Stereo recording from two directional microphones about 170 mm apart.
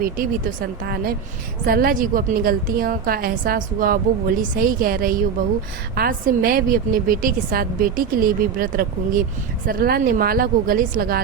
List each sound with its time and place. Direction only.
0.2 s a woman's voice: 60° right (ahead or behind)